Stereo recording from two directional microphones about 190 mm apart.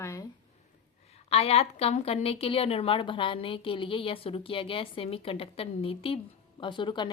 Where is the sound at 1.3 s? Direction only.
30° left (ahead or behind).